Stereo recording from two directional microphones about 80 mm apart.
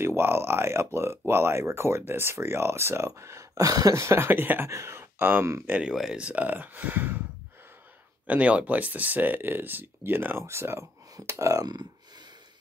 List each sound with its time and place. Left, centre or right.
0.0 s speech: right
3.9 s speech: right
4.6 s speech: right
5.7 s speech: centre
8.3 s speech: centre; by 11.7 s right